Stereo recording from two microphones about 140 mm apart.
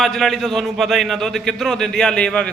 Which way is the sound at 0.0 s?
Centre (ahead or behind).